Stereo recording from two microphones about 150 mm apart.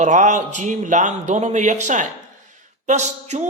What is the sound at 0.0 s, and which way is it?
A man's voice, 55° right (ahead or behind).